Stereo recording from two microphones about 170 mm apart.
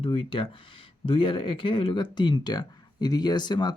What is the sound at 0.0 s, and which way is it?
Speech, 30° left (ahead or behind).